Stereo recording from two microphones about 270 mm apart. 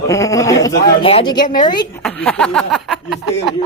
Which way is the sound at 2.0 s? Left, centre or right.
Centre.